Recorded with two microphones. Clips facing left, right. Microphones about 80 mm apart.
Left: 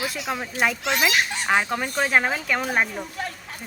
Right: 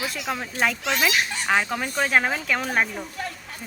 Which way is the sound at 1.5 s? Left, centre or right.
Centre.